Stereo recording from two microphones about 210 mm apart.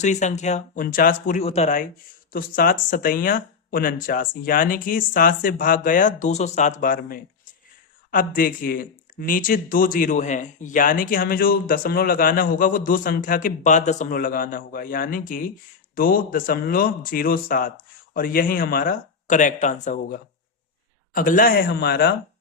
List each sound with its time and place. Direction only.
0.0 s speech: 35° left (ahead or behind); by 22.1 s 50° left (ahead or behind)